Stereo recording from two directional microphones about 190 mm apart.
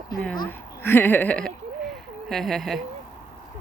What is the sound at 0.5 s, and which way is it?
Speech, 10° left (ahead or behind).